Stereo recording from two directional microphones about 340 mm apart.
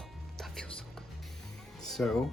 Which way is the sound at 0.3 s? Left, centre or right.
Centre.